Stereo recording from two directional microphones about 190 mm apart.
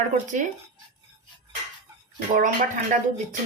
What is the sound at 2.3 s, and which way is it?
Speech, 45° right (ahead or behind).